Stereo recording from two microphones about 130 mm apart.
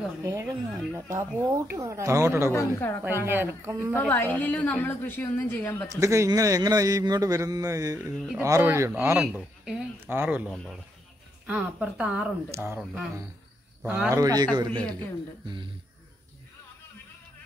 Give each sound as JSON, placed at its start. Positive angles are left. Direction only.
{"t": 0.2, "sound": "a man's voice", "side_deg": -25}
{"t": 2.5, "sound": "a woman's voice", "side_deg": 20}
{"t": 3.0, "sound": "speech", "side_deg": -15}
{"t": 4.1, "sound": "a woman's voice", "side_deg": 15}
{"t": 5.9, "sound": "a man's voice", "side_deg": -25}
{"t": 9.2, "sound": "speech", "side_deg": -5}
{"t": 10.5, "sound": "speech", "side_deg": 5}
{"t": 11.4, "sound": "speech", "side_deg": -10}
{"t": 14.1, "sound": "a man's voice", "side_deg": -30}
{"t": 14.7, "sound": "a woman's voice", "side_deg": 10}
{"t": 15.4, "sound": "a man's voice", "side_deg": -40}